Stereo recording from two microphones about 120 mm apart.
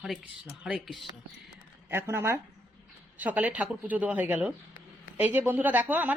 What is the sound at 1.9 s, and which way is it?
Speech, 20° right (ahead or behind).